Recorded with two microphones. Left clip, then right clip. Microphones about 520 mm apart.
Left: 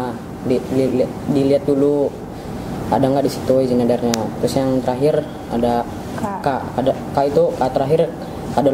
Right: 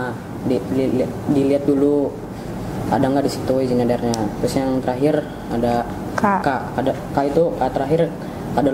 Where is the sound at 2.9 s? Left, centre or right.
Centre.